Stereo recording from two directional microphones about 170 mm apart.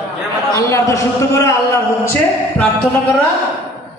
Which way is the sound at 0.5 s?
20° left (ahead or behind).